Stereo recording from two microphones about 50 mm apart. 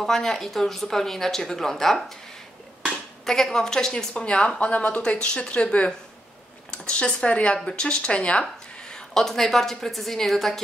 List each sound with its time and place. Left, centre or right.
0.0 s speech: centre
3.3 s speech: centre
8.9 s a woman's voice: centre